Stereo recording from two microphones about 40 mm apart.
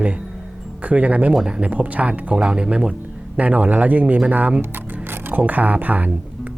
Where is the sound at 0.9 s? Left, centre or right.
Right.